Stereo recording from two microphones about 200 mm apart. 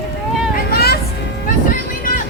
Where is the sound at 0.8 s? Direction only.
50° left (ahead or behind).